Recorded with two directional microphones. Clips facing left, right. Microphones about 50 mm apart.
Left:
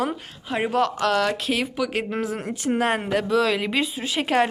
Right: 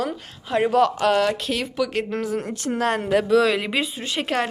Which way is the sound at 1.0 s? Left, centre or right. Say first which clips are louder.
Right 2 dB; centre.